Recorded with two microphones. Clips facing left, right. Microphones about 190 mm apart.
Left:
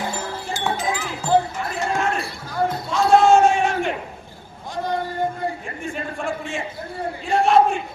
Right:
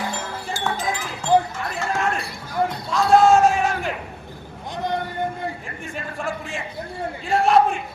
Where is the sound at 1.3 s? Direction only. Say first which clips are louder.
Even; 15° right (ahead or behind).